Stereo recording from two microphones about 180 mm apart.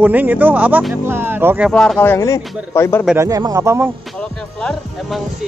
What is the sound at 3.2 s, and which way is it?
Speech, 20° right (ahead or behind).